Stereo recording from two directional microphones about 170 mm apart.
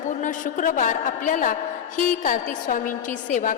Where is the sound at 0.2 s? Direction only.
50° left (ahead or behind).